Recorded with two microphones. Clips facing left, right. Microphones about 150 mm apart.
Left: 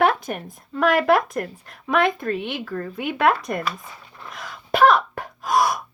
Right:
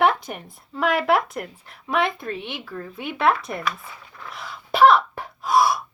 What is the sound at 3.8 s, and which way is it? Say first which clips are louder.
Zipper: even; 20° left (ahead or behind).